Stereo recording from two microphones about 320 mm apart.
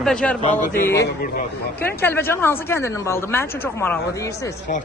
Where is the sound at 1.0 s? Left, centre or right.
Left.